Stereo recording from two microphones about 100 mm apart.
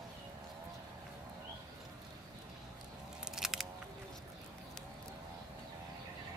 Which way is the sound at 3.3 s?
5° right (ahead or behind).